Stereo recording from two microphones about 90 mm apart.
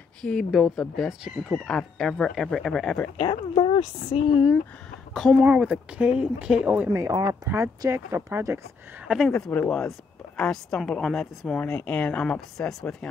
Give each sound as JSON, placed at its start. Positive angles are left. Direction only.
{"t": 0.2, "sound": "speech", "side_deg": 5}
{"t": 3.2, "sound": "speech", "side_deg": 70}
{"t": 5.3, "sound": "speech", "side_deg": -10}
{"t": 6.9, "sound": "speech", "side_deg": -30}
{"t": 9.0, "sound": "speech", "side_deg": -5}
{"t": 9.3, "sound": "speech", "side_deg": 20}
{"t": 9.8, "sound": "speech", "side_deg": 5}
{"t": 11.5, "sound": "speech", "side_deg": 15}